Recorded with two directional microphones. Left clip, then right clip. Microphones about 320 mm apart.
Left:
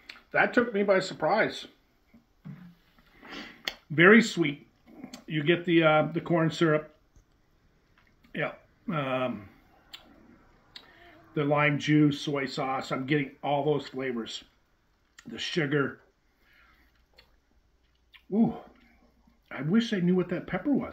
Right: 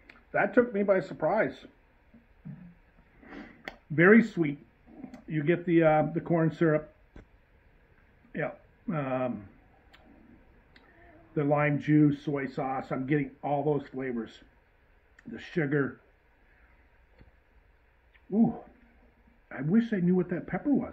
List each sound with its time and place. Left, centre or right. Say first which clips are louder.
0.0 s speech: left 3 dB; centre
3.3 s a sound: left 6 dB; centre
5.0 s speech: left 2 dB; centre
8.3 s speech: left 2 dB; centre
11.3 s speech: left 1 dB; centre
18.1 s a sound: even; centre
19.5 s speech: left 1 dB; centre